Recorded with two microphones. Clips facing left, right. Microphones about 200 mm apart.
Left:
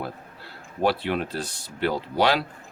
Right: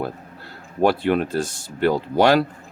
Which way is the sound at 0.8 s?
50° right (ahead or behind).